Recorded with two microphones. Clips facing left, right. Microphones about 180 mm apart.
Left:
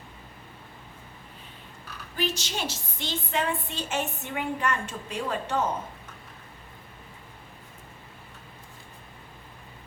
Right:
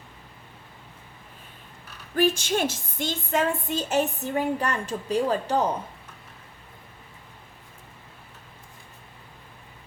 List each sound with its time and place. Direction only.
2.1 s a woman's voice: 50° right (ahead or behind); by 5.6 s 35° right (ahead or behind)